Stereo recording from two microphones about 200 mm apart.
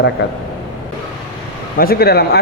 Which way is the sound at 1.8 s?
50° left (ahead or behind).